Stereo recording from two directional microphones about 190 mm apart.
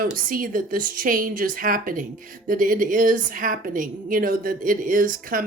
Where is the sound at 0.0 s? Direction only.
50° right (ahead or behind).